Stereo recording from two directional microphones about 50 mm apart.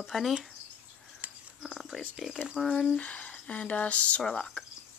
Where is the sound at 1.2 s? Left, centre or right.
Right.